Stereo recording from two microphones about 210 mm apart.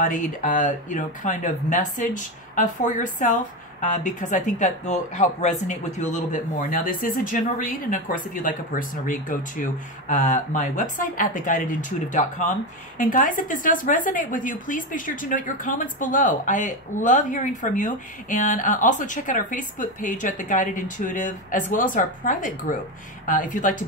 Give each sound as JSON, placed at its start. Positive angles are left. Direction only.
{"t": 0.0, "sound": "speech", "side_deg": 40}